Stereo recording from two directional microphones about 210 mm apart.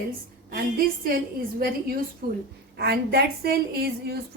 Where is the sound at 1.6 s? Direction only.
45° right (ahead or behind).